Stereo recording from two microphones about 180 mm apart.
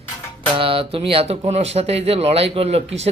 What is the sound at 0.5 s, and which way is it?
Speech, 30° right (ahead or behind).